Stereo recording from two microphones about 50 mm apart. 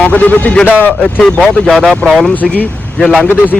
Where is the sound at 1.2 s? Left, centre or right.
Centre.